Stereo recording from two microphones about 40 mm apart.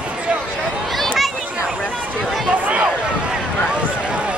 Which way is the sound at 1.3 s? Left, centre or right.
Right.